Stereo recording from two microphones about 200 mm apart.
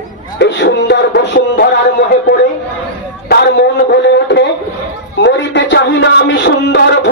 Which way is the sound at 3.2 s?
55° left (ahead or behind).